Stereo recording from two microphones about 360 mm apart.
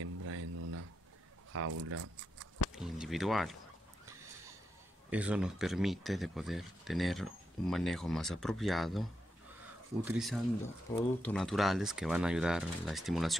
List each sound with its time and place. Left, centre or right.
0.0 s a sound: right
1.5 s speech: right
2.7 s speech: centre
5.1 s speech: centre
10.0 s speech: centre